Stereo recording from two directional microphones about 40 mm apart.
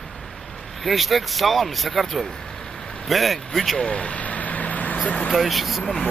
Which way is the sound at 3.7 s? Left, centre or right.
Left.